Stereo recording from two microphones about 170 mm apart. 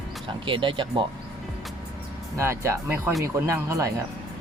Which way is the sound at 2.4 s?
15° right (ahead or behind).